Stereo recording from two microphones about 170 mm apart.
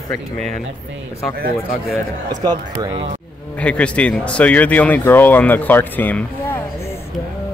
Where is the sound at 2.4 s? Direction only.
25° right (ahead or behind).